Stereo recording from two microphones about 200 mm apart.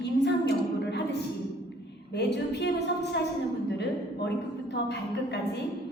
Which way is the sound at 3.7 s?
55° left (ahead or behind).